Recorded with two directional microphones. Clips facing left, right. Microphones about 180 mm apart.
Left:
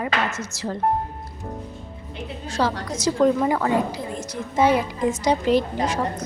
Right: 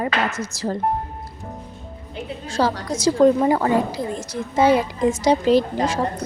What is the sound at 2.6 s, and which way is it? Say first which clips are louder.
A woman's voice: right 3 dB; 35° right (ahead or behind).